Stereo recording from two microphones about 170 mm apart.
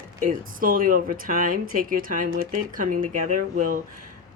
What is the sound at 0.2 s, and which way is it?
Speech, 55° right (ahead or behind).